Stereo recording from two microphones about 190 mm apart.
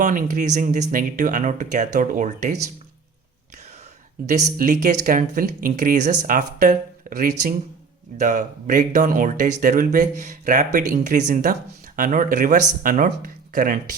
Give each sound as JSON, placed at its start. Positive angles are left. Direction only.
{"t": 0.0, "sound": "speech", "side_deg": -40}
{"t": 4.5, "sound": "speech", "side_deg": -45}
{"t": 8.2, "sound": "speech", "side_deg": -40}